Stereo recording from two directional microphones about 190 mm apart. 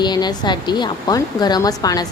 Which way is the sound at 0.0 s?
20° left (ahead or behind).